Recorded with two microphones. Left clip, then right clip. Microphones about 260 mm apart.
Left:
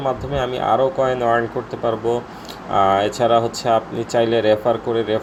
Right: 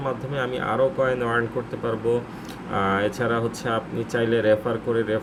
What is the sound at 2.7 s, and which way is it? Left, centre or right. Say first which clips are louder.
Speech: left 7 dB; centre.